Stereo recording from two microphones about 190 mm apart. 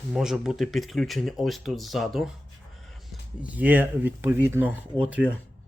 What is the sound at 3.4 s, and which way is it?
Speech, 10° right (ahead or behind).